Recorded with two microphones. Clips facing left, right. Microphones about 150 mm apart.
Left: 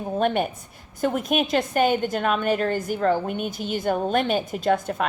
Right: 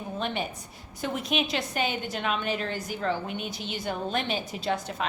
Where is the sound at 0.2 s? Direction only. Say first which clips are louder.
Left 9 dB; 50° left (ahead or behind).